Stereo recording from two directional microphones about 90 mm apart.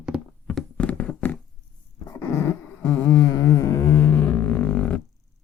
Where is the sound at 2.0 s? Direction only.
30° left (ahead or behind).